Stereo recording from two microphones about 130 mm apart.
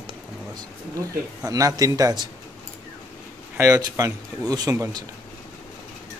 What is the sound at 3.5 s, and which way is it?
A man's voice, 25° right (ahead or behind).